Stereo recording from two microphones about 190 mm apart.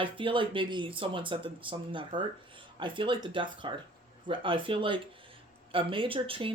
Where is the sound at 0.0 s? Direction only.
25° right (ahead or behind).